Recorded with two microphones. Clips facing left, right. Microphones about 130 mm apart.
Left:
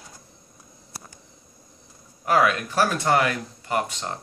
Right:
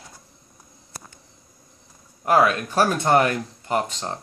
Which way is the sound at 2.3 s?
40° right (ahead or behind).